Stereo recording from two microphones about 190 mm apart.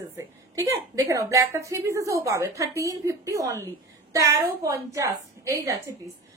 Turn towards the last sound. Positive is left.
turn(degrees=-15)  # may be behind; listen again after turning